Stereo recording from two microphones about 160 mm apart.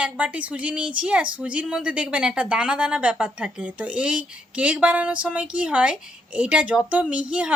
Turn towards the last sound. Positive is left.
turn(degrees=-5)  # may be behind; listen again after turning